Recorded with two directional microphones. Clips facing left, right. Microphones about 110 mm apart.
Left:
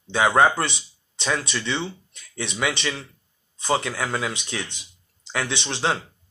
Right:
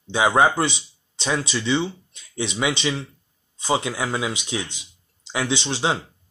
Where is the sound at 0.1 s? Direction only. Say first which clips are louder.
Even; 15° right (ahead or behind).